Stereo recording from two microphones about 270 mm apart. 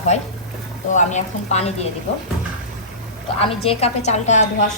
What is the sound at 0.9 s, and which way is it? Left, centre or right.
Speech, left.